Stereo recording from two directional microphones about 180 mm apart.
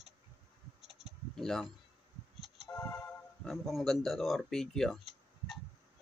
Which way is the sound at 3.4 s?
Centre (ahead or behind).